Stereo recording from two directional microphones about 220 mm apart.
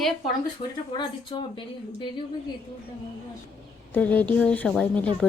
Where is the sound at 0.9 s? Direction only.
20° left (ahead or behind).